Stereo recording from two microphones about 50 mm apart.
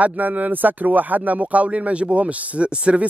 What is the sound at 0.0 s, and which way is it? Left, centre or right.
Speech, right.